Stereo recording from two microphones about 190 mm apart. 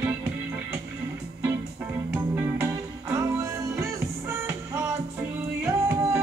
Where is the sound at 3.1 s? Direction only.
15° right (ahead or behind).